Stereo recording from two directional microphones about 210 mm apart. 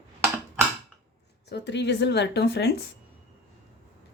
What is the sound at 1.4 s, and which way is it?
Speech, 55° left (ahead or behind).